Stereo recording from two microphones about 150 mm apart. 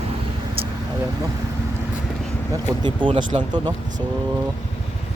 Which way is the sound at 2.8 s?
30° right (ahead or behind).